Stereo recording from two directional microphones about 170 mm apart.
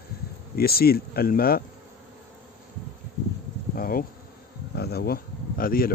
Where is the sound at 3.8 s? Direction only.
60° left (ahead or behind).